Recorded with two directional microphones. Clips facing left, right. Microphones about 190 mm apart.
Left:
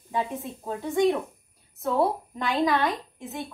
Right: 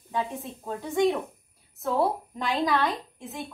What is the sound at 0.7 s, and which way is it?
A woman's voice, centre (ahead or behind).